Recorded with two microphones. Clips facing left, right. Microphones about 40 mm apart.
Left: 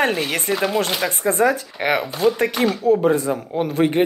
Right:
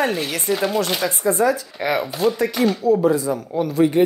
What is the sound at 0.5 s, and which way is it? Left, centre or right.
Speech, centre.